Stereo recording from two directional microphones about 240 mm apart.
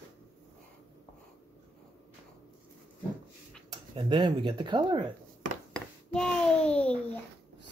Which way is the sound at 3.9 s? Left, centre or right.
Centre.